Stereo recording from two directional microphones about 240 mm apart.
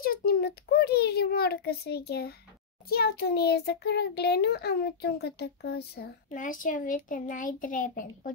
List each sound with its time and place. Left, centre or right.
0.0 s a child's voice: left
2.9 s child singing: left
6.3 s a child's voice: left